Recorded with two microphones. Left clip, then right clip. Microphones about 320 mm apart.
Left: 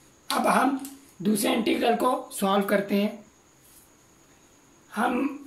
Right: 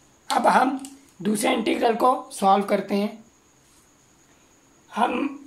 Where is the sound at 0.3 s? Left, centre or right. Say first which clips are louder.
Right 4 dB; centre.